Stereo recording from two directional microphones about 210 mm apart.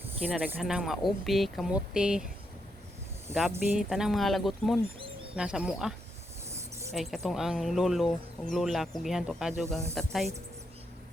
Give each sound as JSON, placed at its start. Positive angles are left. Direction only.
{"t": 0.3, "sound": "speech", "side_deg": -5}
{"t": 3.5, "sound": "speech", "side_deg": -5}
{"t": 4.9, "sound": "bird", "side_deg": -25}
{"t": 5.3, "sound": "speech", "side_deg": -5}
{"t": 6.9, "sound": "speech", "side_deg": 0}